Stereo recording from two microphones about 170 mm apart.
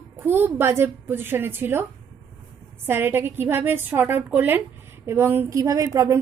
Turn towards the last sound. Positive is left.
turn(degrees=-20)  # may be behind; listen again after turning